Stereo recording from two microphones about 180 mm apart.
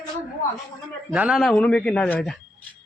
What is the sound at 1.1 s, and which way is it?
A man's voice, 5° right (ahead or behind).